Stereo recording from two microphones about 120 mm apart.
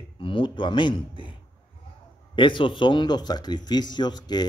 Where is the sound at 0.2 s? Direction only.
45° left (ahead or behind).